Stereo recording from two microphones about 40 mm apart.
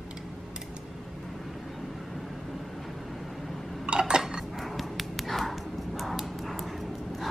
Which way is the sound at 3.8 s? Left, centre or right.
Right.